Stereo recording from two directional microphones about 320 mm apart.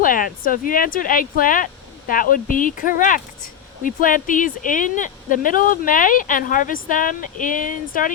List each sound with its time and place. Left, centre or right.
0.0 s speech: left